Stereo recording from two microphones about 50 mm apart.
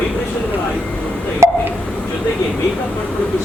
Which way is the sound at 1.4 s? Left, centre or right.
Right.